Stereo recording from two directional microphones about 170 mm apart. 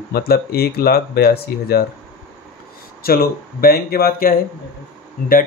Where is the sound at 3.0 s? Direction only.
60° left (ahead or behind).